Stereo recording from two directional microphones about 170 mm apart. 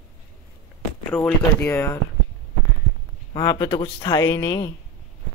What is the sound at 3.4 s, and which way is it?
Speech, 20° left (ahead or behind).